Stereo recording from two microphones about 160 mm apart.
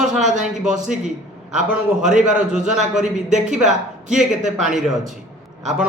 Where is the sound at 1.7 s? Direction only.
5° right (ahead or behind).